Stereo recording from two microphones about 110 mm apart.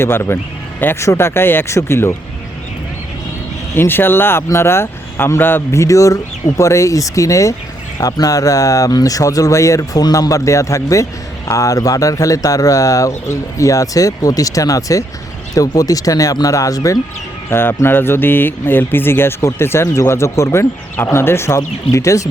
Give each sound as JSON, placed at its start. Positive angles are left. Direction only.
{"t": 0.0, "sound": "speech", "side_deg": 20}
{"t": 3.8, "sound": "speech", "side_deg": 20}
{"t": 17.5, "sound": "speech", "side_deg": 20}